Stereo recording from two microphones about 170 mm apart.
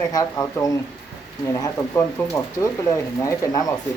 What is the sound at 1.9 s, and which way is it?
A woman's voice, 15° left (ahead or behind).